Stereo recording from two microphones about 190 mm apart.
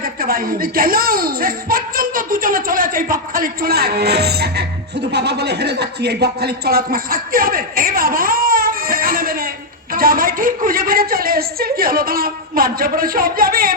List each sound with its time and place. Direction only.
0.0 s a woman's voice: 50° right (ahead or behind)